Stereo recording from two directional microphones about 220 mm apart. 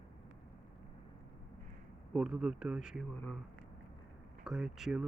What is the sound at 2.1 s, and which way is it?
Speech, 5° right (ahead or behind).